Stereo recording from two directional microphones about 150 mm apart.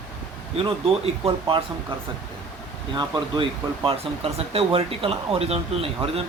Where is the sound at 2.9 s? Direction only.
30° right (ahead or behind).